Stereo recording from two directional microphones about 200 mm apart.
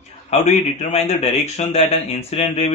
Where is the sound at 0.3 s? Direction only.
35° left (ahead or behind).